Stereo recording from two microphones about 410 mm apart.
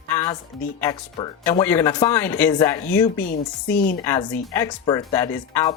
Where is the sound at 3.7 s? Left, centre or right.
Left.